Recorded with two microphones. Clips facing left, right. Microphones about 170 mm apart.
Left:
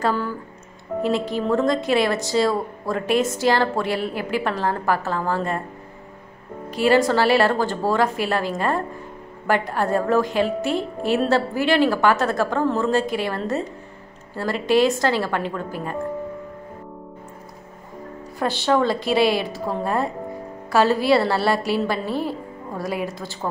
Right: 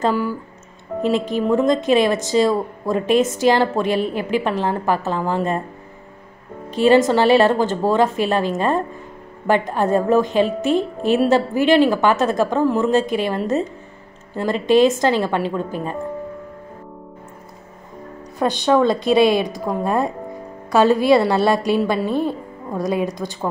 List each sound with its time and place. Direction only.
0.1 s a woman's voice: 10° right (ahead or behind)
6.7 s a woman's voice: 20° right (ahead or behind)
18.4 s a woman's voice: 15° right (ahead or behind)